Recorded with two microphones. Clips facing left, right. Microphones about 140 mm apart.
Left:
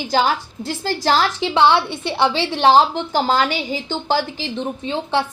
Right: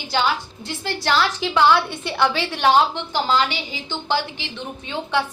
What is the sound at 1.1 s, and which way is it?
A woman's voice, 30° left (ahead or behind).